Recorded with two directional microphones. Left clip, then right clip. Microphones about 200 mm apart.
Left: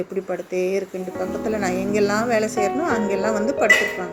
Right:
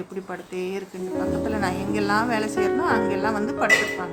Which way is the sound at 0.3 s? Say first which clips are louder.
Left 7 dB; 10° left (ahead or behind).